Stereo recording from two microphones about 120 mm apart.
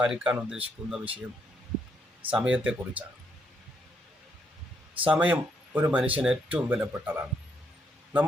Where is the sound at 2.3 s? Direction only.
10° right (ahead or behind).